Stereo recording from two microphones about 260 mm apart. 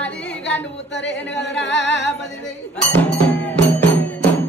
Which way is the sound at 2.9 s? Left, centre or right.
Centre.